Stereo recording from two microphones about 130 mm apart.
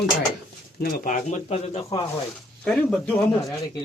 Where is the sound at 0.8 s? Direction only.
85° left; by 1.8 s 55° left (ahead or behind).